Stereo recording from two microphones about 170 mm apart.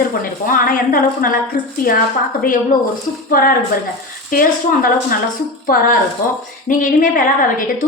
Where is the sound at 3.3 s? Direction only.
55° left (ahead or behind).